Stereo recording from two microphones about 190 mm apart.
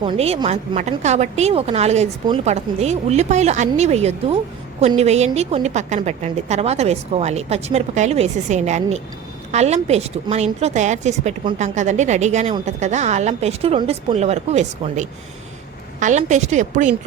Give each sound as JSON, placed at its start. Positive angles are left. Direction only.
{"t": 0.0, "sound": "a woman's voice", "side_deg": -30}